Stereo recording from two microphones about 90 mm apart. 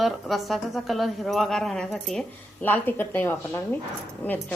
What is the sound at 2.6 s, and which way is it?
A woman's voice, 20° left (ahead or behind).